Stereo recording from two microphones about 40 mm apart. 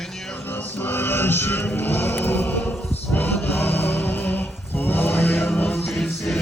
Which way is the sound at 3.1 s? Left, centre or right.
Left.